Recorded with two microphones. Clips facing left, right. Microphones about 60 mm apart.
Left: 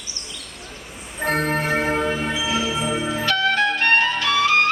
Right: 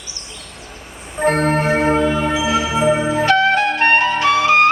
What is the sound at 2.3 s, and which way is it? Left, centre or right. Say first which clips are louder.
Music: right 5 dB; right.